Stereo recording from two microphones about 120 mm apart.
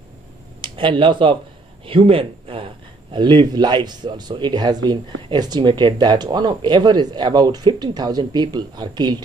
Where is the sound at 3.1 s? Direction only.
40° right (ahead or behind).